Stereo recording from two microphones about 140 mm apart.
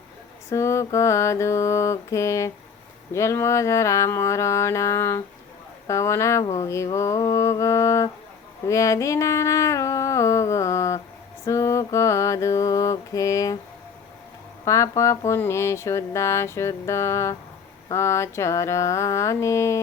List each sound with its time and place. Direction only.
0.5 s speech: 20° left (ahead or behind)
14.6 s speech: 20° left (ahead or behind)